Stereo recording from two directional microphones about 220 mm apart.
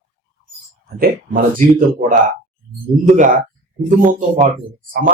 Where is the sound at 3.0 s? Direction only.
35° right (ahead or behind).